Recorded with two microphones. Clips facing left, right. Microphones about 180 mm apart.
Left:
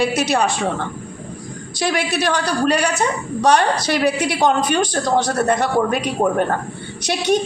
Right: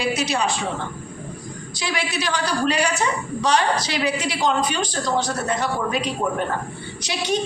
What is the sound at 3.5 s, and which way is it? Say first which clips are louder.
A woman's voice: left 3 dB; 50° left (ahead or behind).